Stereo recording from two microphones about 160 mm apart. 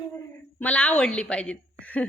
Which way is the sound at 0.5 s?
10° left (ahead or behind).